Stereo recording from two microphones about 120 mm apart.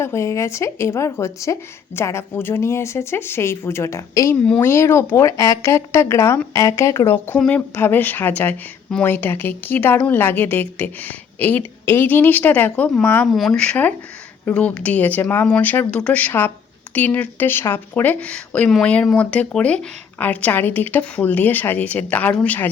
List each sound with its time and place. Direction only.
0.0 s speech: 20° left (ahead or behind)